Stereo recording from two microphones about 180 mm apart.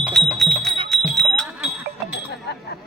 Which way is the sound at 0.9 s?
Centre (ahead or behind).